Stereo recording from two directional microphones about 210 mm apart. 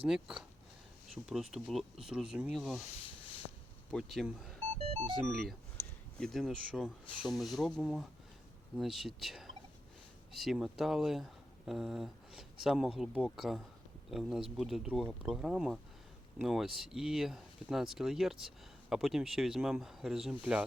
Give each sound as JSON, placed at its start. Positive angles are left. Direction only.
{"t": 0.0, "sound": "speech", "side_deg": -5}
{"t": 3.9, "sound": "speech", "side_deg": 0}
{"t": 4.8, "sound": "speech", "side_deg": -30}
{"t": 5.2, "sound": "speech", "side_deg": 0}